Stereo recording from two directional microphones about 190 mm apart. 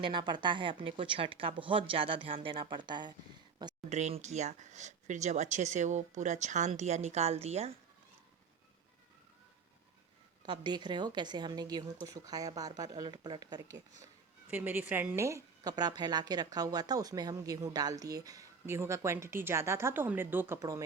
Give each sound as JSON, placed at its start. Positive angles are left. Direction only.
{"t": 0.0, "sound": "speech", "side_deg": -25}
{"t": 3.8, "sound": "speech", "side_deg": -35}
{"t": 10.4, "sound": "speech", "side_deg": -25}
{"t": 14.5, "sound": "a woman's voice", "side_deg": -10}